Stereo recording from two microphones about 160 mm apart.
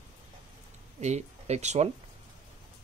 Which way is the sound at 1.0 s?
45° right (ahead or behind).